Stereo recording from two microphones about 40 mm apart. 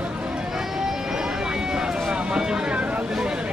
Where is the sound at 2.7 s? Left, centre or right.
Right.